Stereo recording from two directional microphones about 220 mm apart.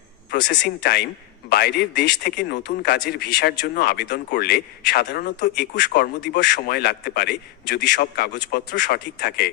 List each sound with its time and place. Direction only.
0.3 s a man's voice: 50° left (ahead or behind)